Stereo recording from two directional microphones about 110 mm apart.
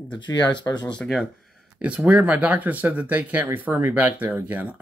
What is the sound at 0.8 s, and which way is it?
Speech, 10° left (ahead or behind).